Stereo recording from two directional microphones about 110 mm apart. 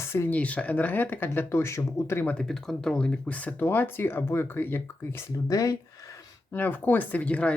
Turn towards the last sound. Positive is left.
turn(degrees=10)  # may be behind; listen again after turning